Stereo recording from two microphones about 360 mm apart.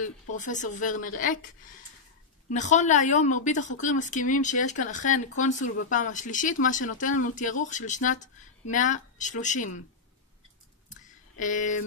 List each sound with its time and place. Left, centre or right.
0.0 s a woman's voice: left
2.5 s a woman's voice: centre
10.9 s a sound: left